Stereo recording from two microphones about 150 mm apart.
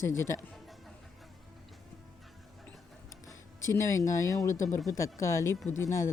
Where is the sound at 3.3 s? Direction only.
20° left (ahead or behind).